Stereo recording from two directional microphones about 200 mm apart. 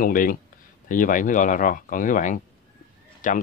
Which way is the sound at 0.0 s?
45° left (ahead or behind).